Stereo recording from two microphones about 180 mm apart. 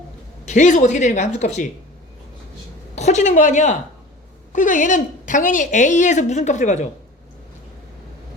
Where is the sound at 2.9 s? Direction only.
40° left (ahead or behind).